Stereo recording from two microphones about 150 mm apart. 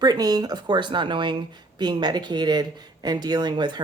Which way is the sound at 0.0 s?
25° right (ahead or behind).